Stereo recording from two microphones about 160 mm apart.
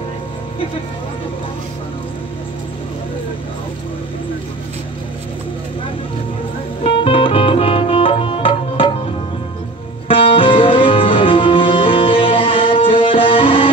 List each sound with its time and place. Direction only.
6.8 s music: 35° left (ahead or behind)
10.0 s music: 35° left (ahead or behind)